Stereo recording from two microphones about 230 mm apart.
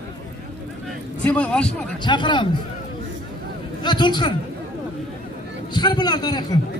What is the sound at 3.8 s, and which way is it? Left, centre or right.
Speech, centre.